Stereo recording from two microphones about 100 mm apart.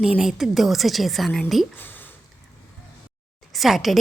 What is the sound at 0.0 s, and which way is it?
A woman's voice, 5° right (ahead or behind).